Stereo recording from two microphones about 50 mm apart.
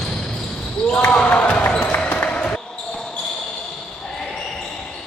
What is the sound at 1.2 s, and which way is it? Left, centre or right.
Basketball bounce, left.